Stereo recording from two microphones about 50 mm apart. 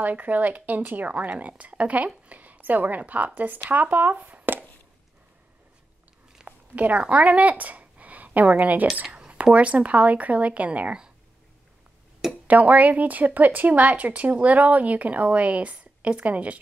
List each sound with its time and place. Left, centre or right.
0.0 s a woman's voice: right
6.4 s speech: right
12.4 s speech: right